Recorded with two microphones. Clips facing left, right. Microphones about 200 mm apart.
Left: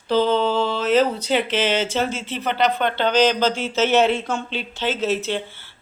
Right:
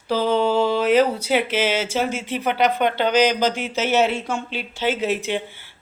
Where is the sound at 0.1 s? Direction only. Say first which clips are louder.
Left 1 dB; 10° right (ahead or behind).